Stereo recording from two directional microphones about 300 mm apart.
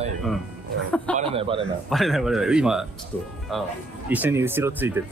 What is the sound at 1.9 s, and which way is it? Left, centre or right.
Speech, centre.